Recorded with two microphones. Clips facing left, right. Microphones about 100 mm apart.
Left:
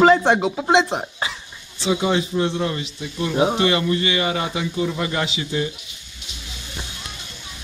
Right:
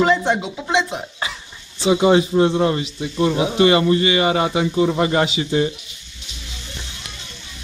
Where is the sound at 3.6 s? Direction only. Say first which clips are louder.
Right 5 dB; 25° right (ahead or behind).